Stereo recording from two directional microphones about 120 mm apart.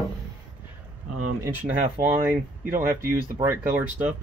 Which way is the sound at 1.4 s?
15° right (ahead or behind).